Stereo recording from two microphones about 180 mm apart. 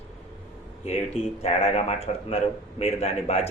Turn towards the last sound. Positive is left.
turn(degrees=35)  # may be behind; listen again after turning